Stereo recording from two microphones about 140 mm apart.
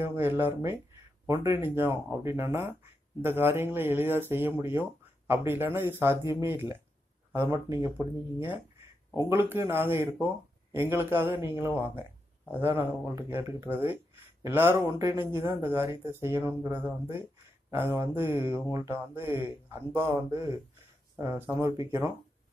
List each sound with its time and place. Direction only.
0.0 s speech: 15° right (ahead or behind)
9.3 s speech: 15° right (ahead or behind)